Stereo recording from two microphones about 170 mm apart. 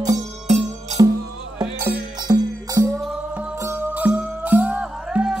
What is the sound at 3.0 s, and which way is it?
Music, 5° right (ahead or behind).